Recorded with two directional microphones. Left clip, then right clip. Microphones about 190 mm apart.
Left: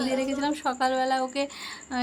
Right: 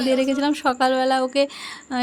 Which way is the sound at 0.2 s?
35° right (ahead or behind).